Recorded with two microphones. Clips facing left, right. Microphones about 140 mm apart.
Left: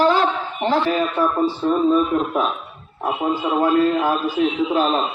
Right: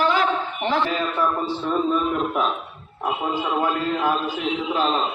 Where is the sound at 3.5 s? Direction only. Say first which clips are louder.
Left 9 dB; 35° left (ahead or behind).